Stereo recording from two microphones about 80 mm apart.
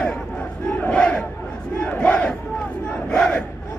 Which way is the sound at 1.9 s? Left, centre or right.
Centre.